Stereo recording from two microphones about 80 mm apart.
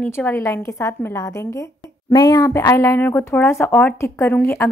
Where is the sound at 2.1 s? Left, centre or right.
Left.